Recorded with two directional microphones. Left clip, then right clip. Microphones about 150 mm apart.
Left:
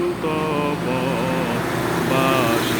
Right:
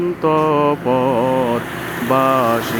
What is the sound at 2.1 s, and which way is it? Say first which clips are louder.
Mantra: right 5 dB; 40° right (ahead or behind).